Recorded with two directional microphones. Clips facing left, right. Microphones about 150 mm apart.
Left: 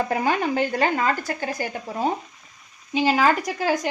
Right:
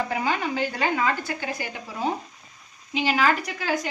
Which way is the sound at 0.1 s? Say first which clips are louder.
Left 4 dB; 50° left (ahead or behind).